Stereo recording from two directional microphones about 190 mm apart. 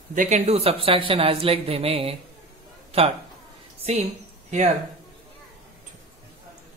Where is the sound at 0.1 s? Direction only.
40° right (ahead or behind).